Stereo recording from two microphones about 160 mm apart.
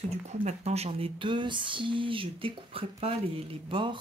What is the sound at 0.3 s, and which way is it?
Speech, 45° right (ahead or behind).